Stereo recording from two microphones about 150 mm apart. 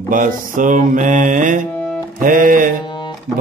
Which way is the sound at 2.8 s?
30° left (ahead or behind).